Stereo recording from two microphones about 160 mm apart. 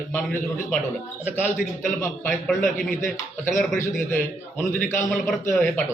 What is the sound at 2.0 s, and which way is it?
Speech, 10° left (ahead or behind).